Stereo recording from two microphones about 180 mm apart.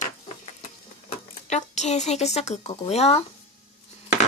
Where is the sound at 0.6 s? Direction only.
40° left (ahead or behind).